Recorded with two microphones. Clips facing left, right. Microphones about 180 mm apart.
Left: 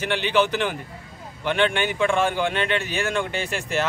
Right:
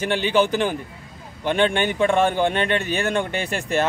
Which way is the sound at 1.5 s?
40° right (ahead or behind).